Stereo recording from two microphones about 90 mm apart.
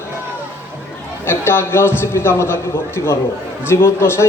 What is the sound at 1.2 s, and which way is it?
A man's voice, 25° left (ahead or behind).